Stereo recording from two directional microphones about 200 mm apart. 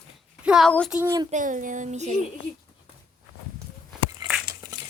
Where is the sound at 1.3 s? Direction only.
40° right (ahead or behind).